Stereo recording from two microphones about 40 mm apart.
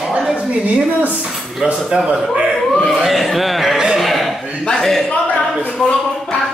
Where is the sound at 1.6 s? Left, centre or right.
Centre.